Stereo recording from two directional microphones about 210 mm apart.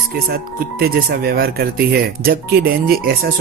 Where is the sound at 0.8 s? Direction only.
45° right (ahead or behind).